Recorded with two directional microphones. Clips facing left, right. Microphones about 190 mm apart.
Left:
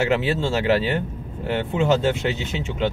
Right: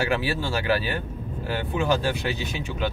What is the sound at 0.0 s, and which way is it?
Speech, 25° left (ahead or behind).